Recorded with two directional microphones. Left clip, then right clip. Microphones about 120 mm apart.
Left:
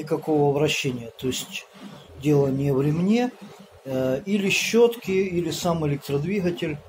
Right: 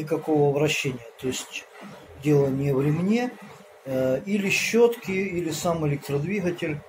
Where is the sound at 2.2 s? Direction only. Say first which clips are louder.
Left 1 dB; 25° left (ahead or behind).